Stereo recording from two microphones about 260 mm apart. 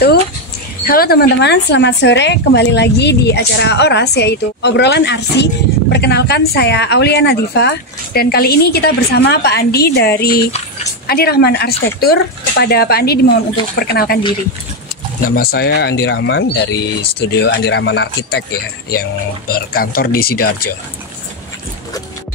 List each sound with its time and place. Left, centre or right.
0.8 s speech: left
15.2 s speech: left
17.0 s speech: left
17.3 s speech: left
19.5 s speech: left